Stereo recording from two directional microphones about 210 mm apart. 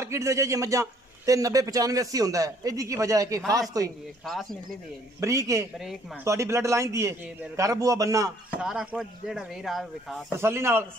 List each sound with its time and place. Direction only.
0.0 s a man's voice: 15° right (ahead or behind)
4.2 s speech: centre (ahead or behind)
5.2 s a man's voice: 15° right (ahead or behind)
8.5 s speech: 5° right (ahead or behind)
10.4 s a man's voice: 10° right (ahead or behind)